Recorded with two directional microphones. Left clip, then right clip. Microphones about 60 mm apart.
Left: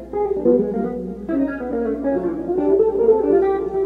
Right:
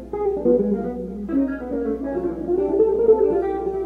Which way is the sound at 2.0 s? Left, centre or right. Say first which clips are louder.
Left 3 dB; centre.